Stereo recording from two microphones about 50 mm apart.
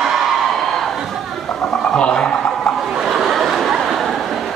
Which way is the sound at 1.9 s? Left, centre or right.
Left.